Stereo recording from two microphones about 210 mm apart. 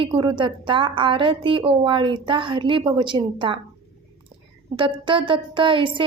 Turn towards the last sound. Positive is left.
turn(degrees=-25)  # may be behind; listen again after turning